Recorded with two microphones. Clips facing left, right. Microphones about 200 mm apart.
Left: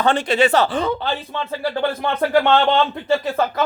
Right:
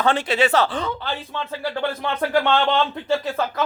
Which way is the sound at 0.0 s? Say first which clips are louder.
Left 3 dB; 5° right (ahead or behind).